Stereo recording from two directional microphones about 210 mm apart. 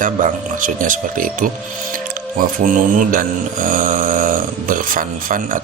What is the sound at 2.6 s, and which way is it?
Speech, 40° right (ahead or behind).